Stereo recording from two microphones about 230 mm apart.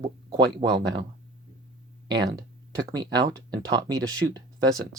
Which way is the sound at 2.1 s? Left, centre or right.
Centre.